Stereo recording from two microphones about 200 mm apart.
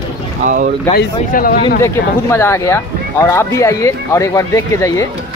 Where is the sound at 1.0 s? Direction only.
45° left (ahead or behind).